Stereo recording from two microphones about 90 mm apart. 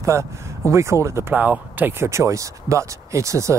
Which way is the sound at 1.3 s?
20° right (ahead or behind).